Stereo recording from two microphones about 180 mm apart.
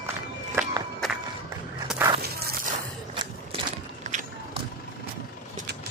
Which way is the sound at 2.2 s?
60° right (ahead or behind).